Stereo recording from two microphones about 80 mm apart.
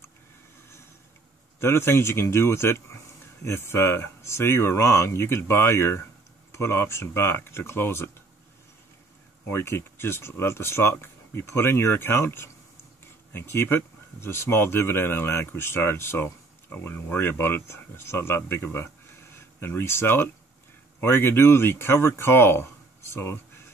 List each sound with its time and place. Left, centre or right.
1.6 s speech: left
9.5 s speech: left